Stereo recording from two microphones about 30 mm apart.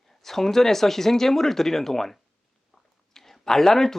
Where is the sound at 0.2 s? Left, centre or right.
Centre.